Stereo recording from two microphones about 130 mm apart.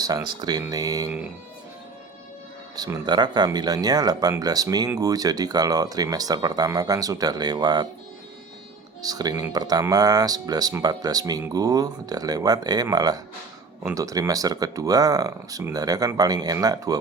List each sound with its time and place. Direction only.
0.0 s speech: 30° right (ahead or behind)
2.7 s speech: 30° right (ahead or behind)
9.0 s speech: 30° right (ahead or behind)